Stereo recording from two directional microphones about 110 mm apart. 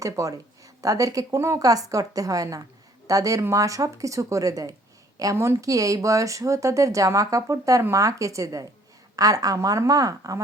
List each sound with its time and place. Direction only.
0.0 s a woman's voice: 30° right (ahead or behind)